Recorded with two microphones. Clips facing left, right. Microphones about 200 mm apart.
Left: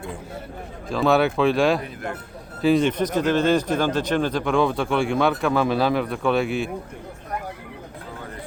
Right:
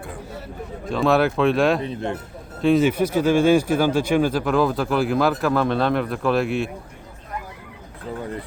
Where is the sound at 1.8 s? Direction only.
25° right (ahead or behind).